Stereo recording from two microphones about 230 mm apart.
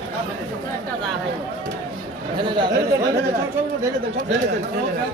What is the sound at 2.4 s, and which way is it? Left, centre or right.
Speech, centre.